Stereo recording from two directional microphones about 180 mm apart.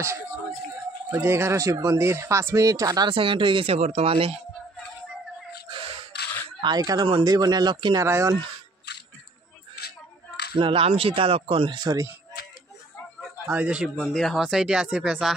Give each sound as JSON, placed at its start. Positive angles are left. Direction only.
{"t": 1.1, "sound": "speech", "side_deg": -15}
{"t": 5.7, "sound": "a sound", "side_deg": -30}
{"t": 6.6, "sound": "speech", "side_deg": -20}
{"t": 9.8, "sound": "a sound", "side_deg": 65}
{"t": 10.5, "sound": "speech", "side_deg": -30}
{"t": 13.5, "sound": "speech", "side_deg": -10}